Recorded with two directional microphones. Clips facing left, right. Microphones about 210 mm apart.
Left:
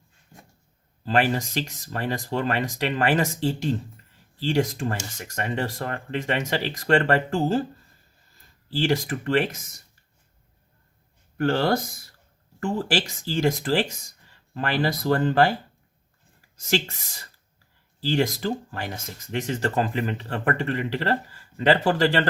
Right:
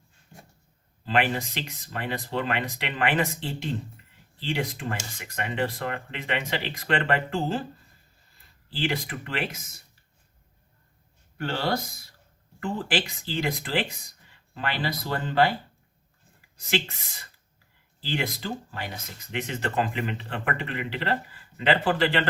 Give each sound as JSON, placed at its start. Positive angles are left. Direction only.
{"t": 1.0, "sound": "speech", "side_deg": 40}
{"t": 8.7, "sound": "speech", "side_deg": 45}
{"t": 11.3, "sound": "speech", "side_deg": 45}
{"t": 16.6, "sound": "speech", "side_deg": 45}